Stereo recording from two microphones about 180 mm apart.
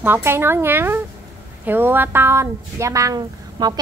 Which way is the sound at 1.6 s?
10° right (ahead or behind).